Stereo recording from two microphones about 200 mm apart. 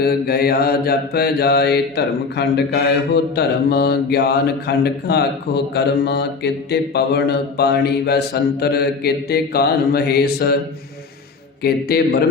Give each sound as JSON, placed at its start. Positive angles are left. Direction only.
{"t": 0.0, "sound": "speech", "side_deg": 50}
{"t": 11.6, "sound": "speech", "side_deg": 55}